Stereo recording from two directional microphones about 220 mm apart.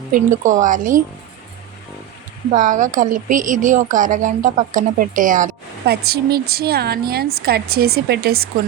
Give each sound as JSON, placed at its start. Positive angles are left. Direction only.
{"t": 0.1, "sound": "speech", "side_deg": -35}
{"t": 2.5, "sound": "a woman's voice", "side_deg": -35}